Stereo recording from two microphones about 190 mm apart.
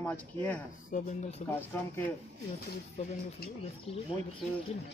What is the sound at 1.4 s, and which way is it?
Speech, 10° left (ahead or behind).